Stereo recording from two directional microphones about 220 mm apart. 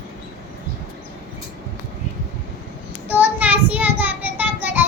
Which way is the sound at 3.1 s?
5° right (ahead or behind).